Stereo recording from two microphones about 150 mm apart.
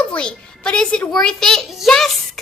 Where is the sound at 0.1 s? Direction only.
5° left (ahead or behind).